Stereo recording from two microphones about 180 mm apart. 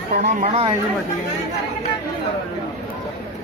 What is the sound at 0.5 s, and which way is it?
Speech, 30° right (ahead or behind).